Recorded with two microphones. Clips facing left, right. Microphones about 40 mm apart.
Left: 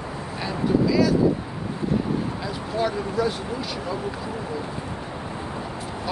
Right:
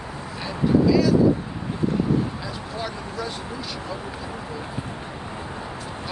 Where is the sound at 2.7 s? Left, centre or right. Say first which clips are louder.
Left 8 dB; centre.